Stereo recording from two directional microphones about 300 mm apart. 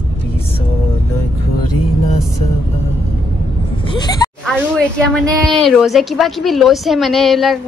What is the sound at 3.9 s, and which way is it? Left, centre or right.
Speech, centre.